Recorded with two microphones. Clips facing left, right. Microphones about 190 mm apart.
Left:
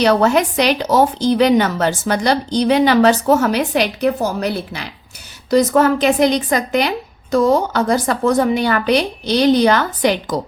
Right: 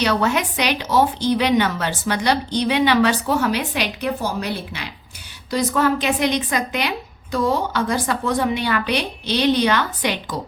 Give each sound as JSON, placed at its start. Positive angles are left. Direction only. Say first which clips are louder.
{"t": 0.0, "sound": "speech", "louder": "left 6 dB", "side_deg": 40}